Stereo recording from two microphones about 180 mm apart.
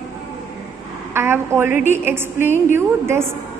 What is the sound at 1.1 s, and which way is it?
A woman's voice, 15° right (ahead or behind).